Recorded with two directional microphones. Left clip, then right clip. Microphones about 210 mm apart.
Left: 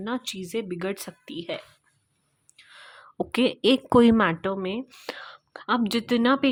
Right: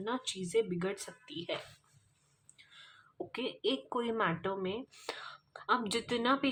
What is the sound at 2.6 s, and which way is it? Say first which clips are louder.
A woman's voice: left 9 dB; 40° left (ahead or behind).